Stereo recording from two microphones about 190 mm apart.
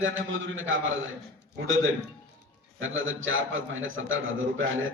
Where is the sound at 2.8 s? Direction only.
90° right.